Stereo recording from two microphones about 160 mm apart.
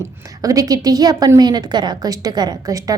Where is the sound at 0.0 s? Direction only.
20° right (ahead or behind).